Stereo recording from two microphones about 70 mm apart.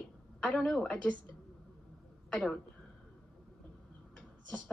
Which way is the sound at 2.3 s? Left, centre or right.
Centre.